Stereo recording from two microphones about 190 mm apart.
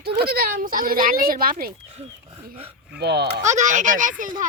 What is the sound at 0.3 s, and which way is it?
Speech, 50° right (ahead or behind).